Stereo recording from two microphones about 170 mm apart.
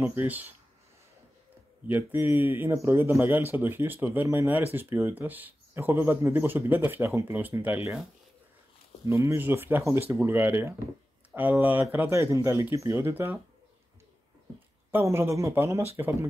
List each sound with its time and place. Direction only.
0.0 s speech: 15° right (ahead or behind)
1.9 s speech: 10° right (ahead or behind)
9.0 s speech: 15° right (ahead or behind)
14.9 s speech: 15° right (ahead or behind)